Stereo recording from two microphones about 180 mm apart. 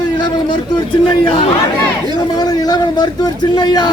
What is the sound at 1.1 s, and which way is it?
Speech, 30° left (ahead or behind).